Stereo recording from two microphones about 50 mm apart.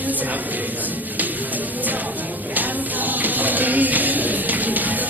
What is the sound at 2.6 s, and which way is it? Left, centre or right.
Music, right.